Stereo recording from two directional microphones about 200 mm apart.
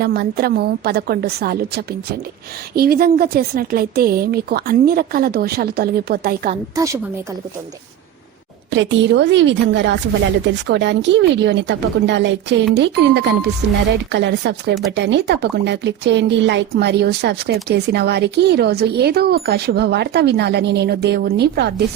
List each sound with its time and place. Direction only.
0.0 s a woman's voice: 50° right (ahead or behind)
6.7 s a woman's voice: 15° right (ahead or behind)
8.7 s speech: 65° right (ahead or behind)